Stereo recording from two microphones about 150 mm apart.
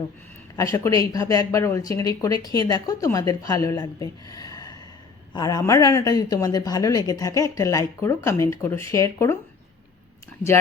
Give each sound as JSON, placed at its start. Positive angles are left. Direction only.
{"t": 0.5, "sound": "speech", "side_deg": 20}